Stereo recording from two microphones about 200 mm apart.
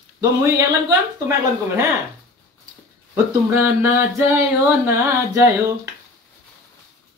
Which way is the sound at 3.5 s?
10° right (ahead or behind).